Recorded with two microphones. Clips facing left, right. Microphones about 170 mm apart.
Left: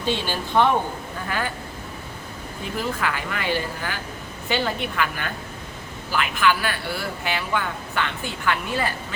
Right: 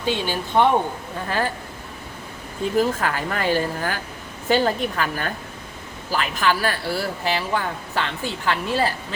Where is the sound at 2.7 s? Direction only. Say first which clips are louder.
Right 5 dB; 40° right (ahead or behind).